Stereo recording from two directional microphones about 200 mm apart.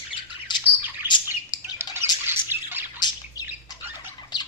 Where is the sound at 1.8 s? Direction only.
10° right (ahead or behind).